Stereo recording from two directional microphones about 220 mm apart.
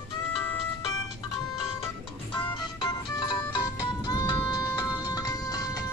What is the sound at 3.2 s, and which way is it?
Music, 15° left (ahead or behind).